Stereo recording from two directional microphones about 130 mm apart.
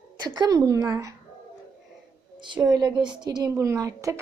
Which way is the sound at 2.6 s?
35° right (ahead or behind).